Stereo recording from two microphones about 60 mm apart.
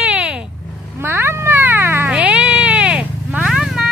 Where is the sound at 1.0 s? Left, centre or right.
Right.